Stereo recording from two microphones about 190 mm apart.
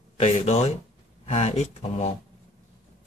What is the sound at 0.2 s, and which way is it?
Speech, 35° left (ahead or behind).